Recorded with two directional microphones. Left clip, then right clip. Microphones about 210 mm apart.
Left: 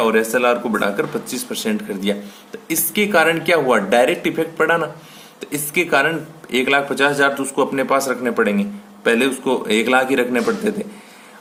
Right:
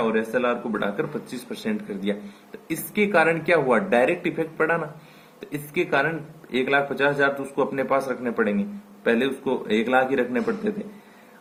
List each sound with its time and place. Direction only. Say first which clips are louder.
0.0 s speech: left 7 dB; 30° left (ahead or behind)